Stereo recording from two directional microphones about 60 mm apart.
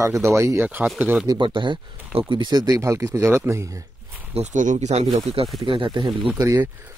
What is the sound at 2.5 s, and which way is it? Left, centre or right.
Speech, right.